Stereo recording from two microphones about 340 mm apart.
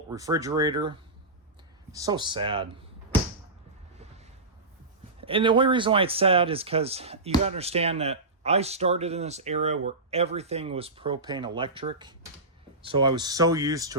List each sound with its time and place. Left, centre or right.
0.1 s speech: centre
5.2 s speech: centre